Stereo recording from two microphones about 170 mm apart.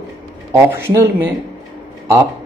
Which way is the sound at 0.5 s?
15° right (ahead or behind).